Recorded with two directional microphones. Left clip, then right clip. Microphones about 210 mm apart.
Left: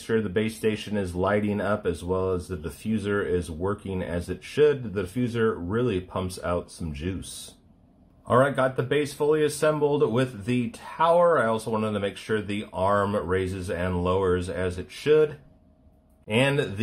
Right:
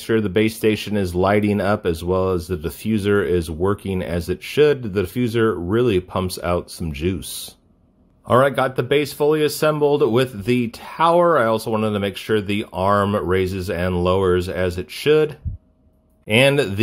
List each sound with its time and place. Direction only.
0.0 s speech: 40° right (ahead or behind)
8.3 s speech: 40° right (ahead or behind)